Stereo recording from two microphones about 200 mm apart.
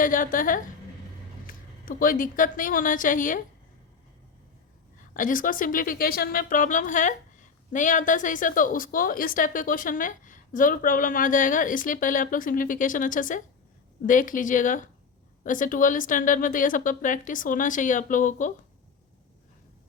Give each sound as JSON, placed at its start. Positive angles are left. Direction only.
{"t": 0.0, "sound": "a woman's voice", "side_deg": 45}
{"t": 5.1, "sound": "a woman's voice", "side_deg": 40}